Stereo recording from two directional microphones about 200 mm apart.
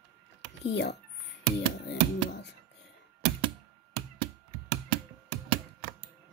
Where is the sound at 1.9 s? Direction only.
55° left (ahead or behind).